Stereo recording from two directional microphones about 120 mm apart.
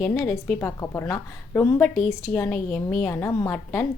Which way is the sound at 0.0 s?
10° left (ahead or behind).